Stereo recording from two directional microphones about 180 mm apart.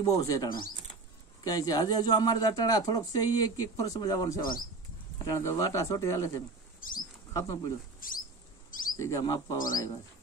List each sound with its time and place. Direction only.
0.0 s speech: 20° left (ahead or behind)
6.8 s speech: 50° left (ahead or behind)
7.3 s speech: 20° left (ahead or behind)
8.0 s rodents: 50° left (ahead or behind)
8.6 s bird: 50° left (ahead or behind)
8.9 s speech: 15° left (ahead or behind)